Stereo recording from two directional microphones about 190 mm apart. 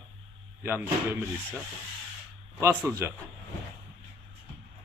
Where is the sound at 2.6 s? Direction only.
15° right (ahead or behind).